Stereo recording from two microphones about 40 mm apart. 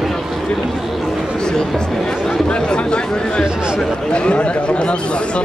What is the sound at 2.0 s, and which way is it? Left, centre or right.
Chatter, centre.